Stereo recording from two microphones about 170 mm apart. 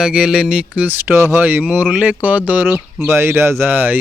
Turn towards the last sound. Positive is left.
turn(degrees=-10)  # may be behind; listen again after turning